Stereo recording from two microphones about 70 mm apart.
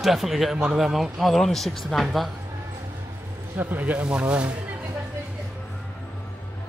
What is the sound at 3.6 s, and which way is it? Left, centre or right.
Speech, right.